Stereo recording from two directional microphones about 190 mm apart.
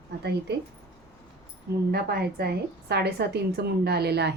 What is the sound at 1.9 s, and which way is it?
A woman's voice, 55° right (ahead or behind).